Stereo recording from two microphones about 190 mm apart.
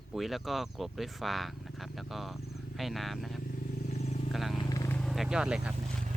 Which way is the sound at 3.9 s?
35° left (ahead or behind).